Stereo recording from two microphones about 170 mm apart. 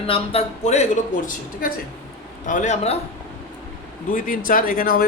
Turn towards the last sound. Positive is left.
turn(degrees=60)  # may be behind; listen again after turning